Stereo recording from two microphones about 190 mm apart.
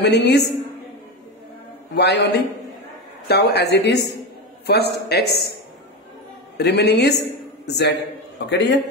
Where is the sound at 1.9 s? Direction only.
60° left (ahead or behind).